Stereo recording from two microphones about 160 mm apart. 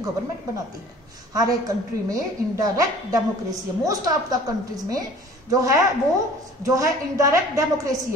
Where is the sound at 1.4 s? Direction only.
20° right (ahead or behind).